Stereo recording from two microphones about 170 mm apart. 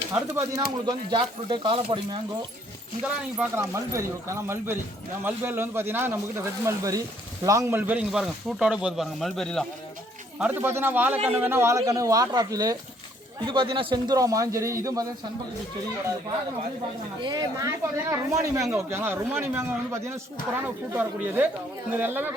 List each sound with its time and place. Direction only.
0.1 s speech: 20° right (ahead or behind)
3.0 s speech: 5° right (ahead or behind)
3.6 s speech: 15° right (ahead or behind); by 9.6 s centre (ahead or behind)
10.3 s speech: 10° right (ahead or behind)
17.2 s speech: 25° right (ahead or behind)